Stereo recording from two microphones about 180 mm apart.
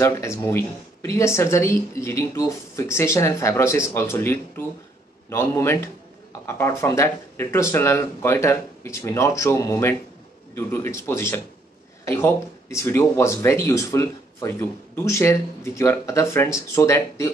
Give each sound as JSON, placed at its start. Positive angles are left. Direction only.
{"t": 0.0, "sound": "speech", "side_deg": 15}